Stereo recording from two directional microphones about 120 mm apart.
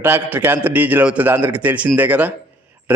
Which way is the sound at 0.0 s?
15° right (ahead or behind).